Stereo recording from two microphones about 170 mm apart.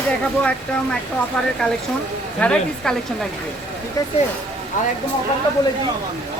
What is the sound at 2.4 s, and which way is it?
Speech, 5° left (ahead or behind).